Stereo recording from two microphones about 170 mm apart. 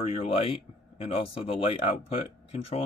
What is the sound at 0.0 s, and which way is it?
Speech, 35° left (ahead or behind).